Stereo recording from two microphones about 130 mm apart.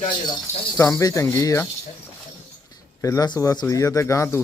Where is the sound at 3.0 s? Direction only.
25° left (ahead or behind).